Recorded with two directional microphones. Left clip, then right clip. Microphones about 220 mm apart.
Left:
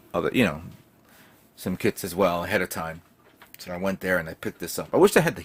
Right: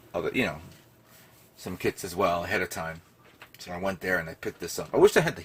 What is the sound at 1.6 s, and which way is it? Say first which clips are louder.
Speech: left 4 dB; 50° left (ahead or behind).